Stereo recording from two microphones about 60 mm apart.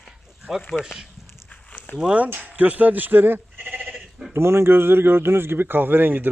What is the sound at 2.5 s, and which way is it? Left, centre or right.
Speech, right.